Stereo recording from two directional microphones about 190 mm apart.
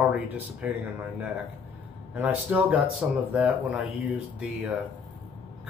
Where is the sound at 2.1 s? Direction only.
10° right (ahead or behind).